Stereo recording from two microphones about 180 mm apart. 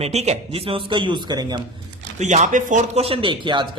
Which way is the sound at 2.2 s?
40° right (ahead or behind).